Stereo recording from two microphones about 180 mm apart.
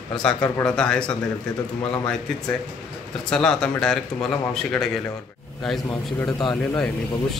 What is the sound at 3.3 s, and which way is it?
Speech, 5° left (ahead or behind).